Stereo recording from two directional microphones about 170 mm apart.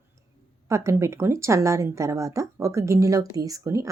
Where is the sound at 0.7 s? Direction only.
15° right (ahead or behind).